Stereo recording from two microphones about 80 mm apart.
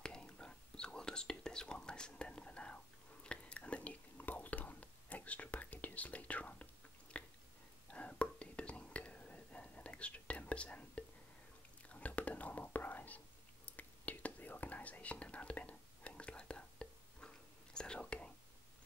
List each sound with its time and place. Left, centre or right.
0.0 s whispering: centre